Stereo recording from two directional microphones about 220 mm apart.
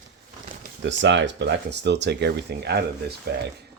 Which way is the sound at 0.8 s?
55° right (ahead or behind).